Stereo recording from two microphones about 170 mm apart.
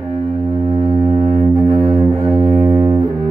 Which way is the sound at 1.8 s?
35° right (ahead or behind).